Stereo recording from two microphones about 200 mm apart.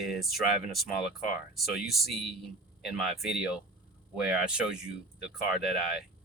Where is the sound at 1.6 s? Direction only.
Centre (ahead or behind).